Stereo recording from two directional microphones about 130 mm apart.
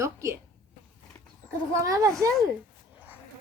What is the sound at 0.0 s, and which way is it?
Speech, 25° right (ahead or behind).